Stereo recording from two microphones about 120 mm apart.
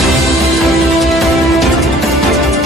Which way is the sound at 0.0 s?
Centre (ahead or behind).